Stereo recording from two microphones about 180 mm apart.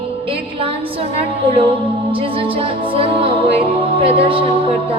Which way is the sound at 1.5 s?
30° right (ahead or behind).